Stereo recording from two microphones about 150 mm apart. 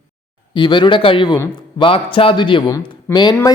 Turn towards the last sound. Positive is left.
turn(degrees=25)  # may be behind; listen again after turning